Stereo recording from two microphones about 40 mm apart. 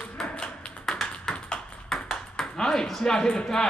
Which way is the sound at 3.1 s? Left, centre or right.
Left.